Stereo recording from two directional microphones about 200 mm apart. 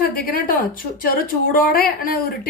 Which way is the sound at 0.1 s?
45° left (ahead or behind).